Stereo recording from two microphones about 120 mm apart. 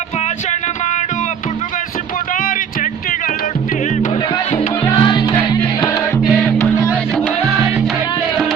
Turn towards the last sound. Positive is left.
turn(degrees=20)  # may be behind; listen again after turning